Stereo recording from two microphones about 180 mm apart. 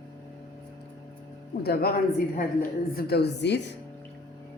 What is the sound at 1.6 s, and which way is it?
Speech, 60° left (ahead or behind).